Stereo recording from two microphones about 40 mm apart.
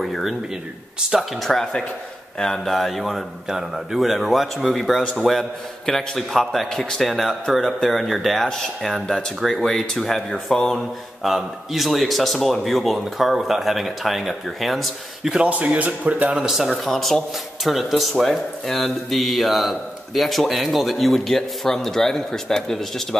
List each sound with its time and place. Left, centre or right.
1.4 s speech: centre
4.6 s speech: centre
8.5 s speech: centre
10.3 s speech: centre
11.2 s speech: centre
15.4 s a man's voice: right
16.3 s speech: centre
16.6 s speech: centre